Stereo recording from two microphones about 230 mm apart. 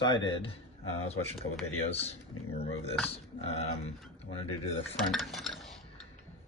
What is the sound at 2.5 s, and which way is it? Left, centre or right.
Speech, left.